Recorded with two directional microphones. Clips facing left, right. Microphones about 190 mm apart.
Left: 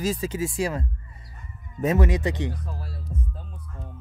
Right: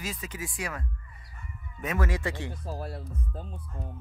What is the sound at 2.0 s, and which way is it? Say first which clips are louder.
Speech: left 6 dB; 20° left (ahead or behind).